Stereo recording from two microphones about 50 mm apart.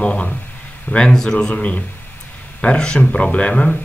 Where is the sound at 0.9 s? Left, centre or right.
Centre.